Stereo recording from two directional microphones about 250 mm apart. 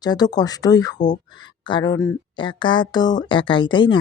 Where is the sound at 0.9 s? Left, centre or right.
Left.